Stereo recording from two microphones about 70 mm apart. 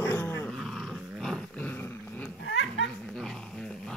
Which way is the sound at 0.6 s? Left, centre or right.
Centre.